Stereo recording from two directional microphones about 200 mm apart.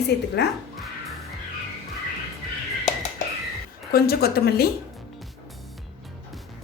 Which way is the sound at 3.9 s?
50° left (ahead or behind).